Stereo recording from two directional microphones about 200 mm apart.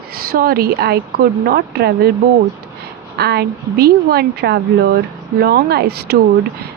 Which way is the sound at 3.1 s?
55° right (ahead or behind).